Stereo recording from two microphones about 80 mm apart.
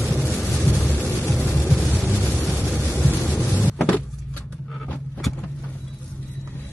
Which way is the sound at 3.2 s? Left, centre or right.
Centre.